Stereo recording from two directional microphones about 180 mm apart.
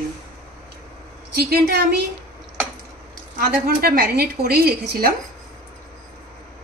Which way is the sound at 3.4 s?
55° right (ahead or behind).